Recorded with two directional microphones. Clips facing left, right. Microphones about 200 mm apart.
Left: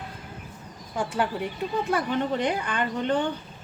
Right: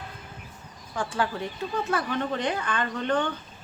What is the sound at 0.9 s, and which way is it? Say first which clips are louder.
A woman's voice: left 2 dB; 10° left (ahead or behind).